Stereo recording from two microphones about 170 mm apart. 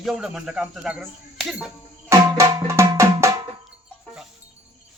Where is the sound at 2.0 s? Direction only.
15° right (ahead or behind).